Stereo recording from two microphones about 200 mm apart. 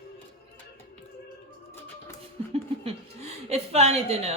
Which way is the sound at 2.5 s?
30° right (ahead or behind).